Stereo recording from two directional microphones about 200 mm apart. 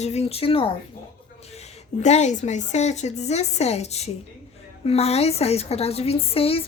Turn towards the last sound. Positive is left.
turn(degrees=30)  # may be behind; listen again after turning